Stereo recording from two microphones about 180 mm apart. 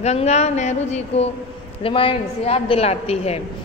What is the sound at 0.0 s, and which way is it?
A woman's voice, 35° left (ahead or behind).